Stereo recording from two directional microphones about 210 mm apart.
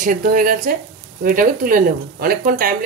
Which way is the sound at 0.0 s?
40° right (ahead or behind).